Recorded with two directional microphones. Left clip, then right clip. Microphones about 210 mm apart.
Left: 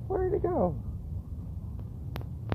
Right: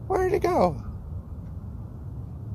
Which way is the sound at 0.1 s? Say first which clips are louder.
Right 6 dB; 25° right (ahead or behind).